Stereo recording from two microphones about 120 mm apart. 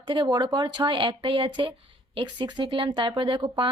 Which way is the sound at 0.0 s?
45° right (ahead or behind).